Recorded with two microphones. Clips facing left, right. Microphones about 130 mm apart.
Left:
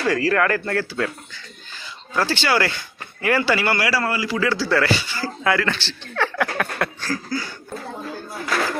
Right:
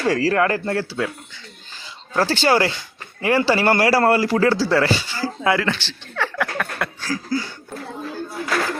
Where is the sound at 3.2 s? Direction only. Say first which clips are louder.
Right 2 dB; 25° right (ahead or behind).